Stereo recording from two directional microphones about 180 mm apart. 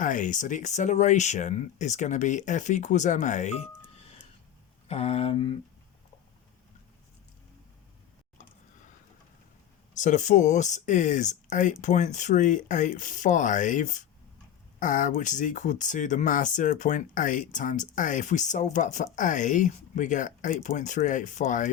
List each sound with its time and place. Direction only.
0.0 s speech: 45° left (ahead or behind)
4.9 s speech: 35° left (ahead or behind)
9.9 s speech: 40° left (ahead or behind)